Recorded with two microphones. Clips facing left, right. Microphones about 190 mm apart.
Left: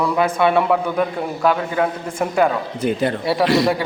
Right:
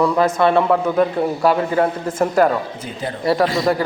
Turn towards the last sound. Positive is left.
turn(degrees=70)  # may be behind; listen again after turning